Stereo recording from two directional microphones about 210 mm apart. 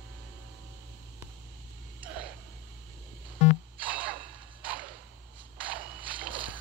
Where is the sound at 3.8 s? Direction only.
5° right (ahead or behind).